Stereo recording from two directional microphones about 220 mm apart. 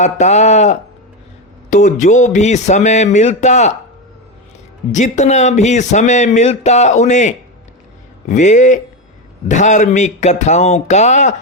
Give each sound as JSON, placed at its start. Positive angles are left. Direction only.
{"t": 0.0, "sound": "speech", "side_deg": 30}
{"t": 4.9, "sound": "speech", "side_deg": 35}